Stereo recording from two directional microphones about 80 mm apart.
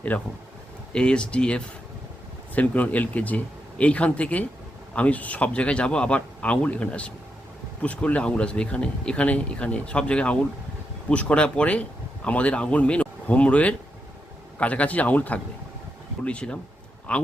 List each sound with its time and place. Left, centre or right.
0.1 s speech: centre